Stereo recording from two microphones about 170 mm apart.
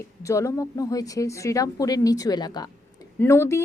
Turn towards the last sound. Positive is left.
turn(degrees=15)  # may be behind; listen again after turning